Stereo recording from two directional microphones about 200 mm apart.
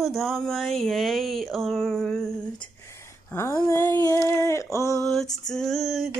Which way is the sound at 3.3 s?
15° left (ahead or behind).